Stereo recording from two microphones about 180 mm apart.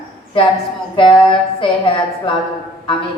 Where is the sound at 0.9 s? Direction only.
30° left (ahead or behind).